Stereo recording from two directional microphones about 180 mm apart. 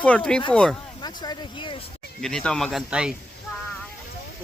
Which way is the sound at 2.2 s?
5° left (ahead or behind).